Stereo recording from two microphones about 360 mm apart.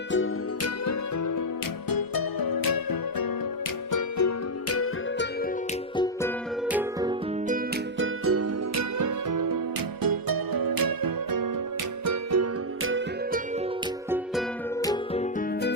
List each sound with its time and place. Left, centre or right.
0.1 s music: left
0.9 s music: left
1.9 s music: left
3.9 s music: left
6.0 s music: centre
6.7 s music: centre
7.9 s music: right
10.0 s music: right
12.0 s music: right
14.8 s music: centre